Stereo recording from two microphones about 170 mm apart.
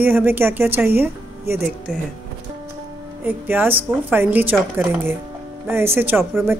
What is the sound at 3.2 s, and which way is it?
A woman's voice, 10° right (ahead or behind).